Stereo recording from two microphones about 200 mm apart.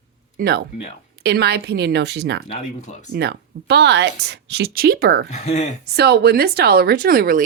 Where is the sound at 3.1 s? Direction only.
55° right (ahead or behind).